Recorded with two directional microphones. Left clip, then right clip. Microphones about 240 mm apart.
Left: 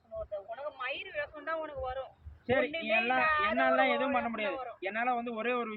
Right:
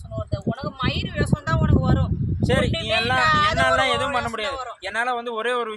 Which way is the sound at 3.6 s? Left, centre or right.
Right.